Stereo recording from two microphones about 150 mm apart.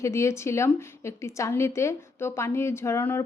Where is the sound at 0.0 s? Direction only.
20° left (ahead or behind).